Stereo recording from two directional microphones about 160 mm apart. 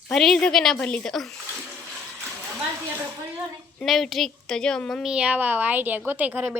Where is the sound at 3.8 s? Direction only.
Centre (ahead or behind).